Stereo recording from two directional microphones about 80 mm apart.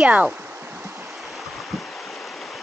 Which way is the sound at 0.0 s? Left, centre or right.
Centre.